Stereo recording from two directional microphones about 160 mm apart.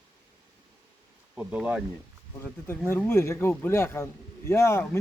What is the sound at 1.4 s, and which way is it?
Speech, 5° right (ahead or behind).